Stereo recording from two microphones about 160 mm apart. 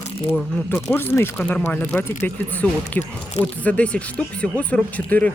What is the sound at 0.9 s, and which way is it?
Speech, 15° left (ahead or behind).